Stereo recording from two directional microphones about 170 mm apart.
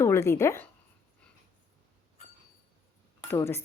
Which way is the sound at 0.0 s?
15° left (ahead or behind).